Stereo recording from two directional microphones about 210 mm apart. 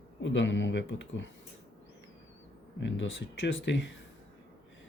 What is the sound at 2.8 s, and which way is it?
Speech, 60° left (ahead or behind).